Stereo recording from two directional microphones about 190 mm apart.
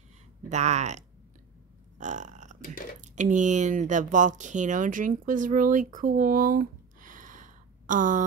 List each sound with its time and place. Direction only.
0.5 s speech: 35° right (ahead or behind)
2.0 s burping: 40° right (ahead or behind)
3.0 s speech: 40° right (ahead or behind)